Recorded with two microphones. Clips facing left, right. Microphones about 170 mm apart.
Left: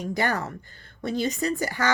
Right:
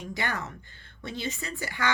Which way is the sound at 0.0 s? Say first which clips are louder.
Left 7 dB; 40° left (ahead or behind).